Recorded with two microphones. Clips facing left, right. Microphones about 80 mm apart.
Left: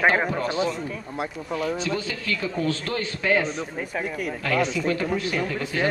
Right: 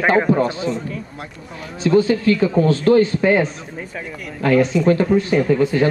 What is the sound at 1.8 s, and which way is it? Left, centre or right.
Speech, right.